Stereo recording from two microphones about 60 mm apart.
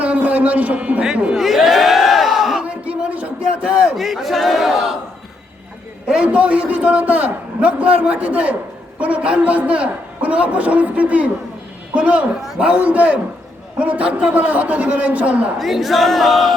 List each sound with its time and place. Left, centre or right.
0.0 s a sound: right
1.0 s speech: centre
1.4 s music: centre
2.6 s a sound: centre
3.9 s battle cry: centre
6.1 s a man's voice: centre
15.5 s battle cry: centre